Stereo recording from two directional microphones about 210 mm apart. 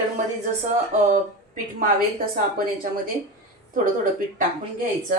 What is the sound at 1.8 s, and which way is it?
Speech, 45° right (ahead or behind).